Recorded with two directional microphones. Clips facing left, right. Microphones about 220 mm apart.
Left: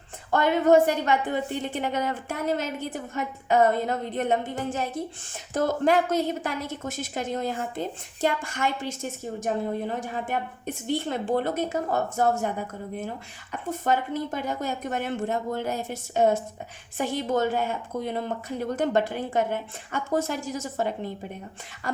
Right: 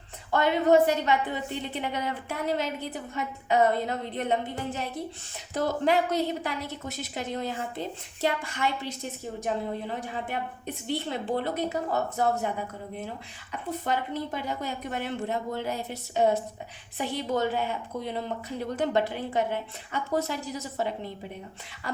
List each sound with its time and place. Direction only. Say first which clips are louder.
0.3 s a woman's voice: left 2 dB; 50° left (ahead or behind)
13.7 s a woman's voice: left 4 dB; 45° left (ahead or behind)